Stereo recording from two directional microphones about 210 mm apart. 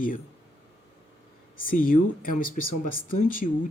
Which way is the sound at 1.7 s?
40° left (ahead or behind).